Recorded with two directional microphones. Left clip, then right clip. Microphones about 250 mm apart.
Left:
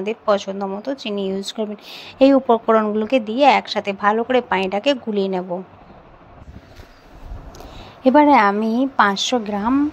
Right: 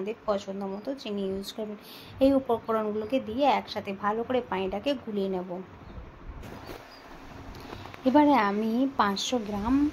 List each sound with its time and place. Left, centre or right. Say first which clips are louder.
0.0 s speech: left 11 dB; left
7.5 s a woman's voice: left 4 dB; left